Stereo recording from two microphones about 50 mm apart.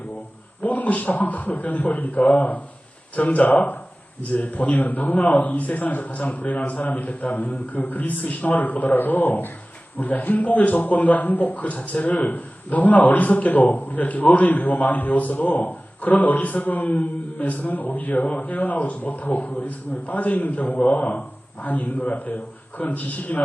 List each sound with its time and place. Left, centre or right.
0.6 s speech: left